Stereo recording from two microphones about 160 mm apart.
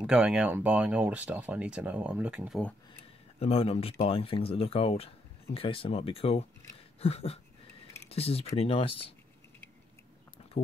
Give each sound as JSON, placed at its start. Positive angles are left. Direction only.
{"t": 0.0, "sound": "speech", "side_deg": -5}
{"t": 3.3, "sound": "speech", "side_deg": 40}